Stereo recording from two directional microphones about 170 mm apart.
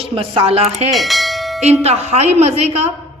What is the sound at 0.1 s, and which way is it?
Speech, 35° right (ahead or behind).